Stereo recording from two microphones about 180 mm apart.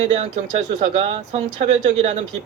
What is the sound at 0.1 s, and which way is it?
Speech, 40° right (ahead or behind).